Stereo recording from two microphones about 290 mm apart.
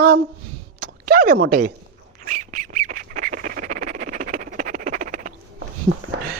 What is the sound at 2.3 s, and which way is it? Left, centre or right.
Squawk, right.